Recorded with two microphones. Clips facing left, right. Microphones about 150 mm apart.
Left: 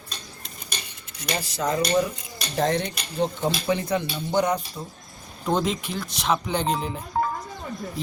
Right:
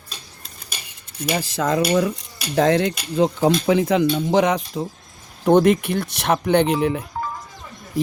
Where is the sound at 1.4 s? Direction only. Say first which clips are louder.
Right 4 dB; 90° right.